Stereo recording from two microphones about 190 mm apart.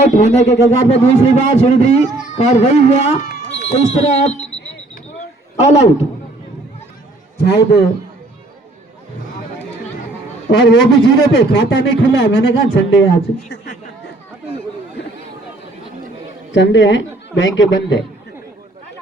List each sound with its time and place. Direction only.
0.0 s a man's voice: 40° left (ahead or behind)
5.5 s a man's voice: 35° left (ahead or behind)
7.3 s a man's voice: 60° left (ahead or behind)
10.5 s a man's voice: 65° left (ahead or behind)
16.5 s a man's voice: 70° left (ahead or behind)